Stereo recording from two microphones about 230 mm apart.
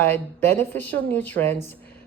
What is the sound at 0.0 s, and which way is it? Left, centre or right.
Speech, centre.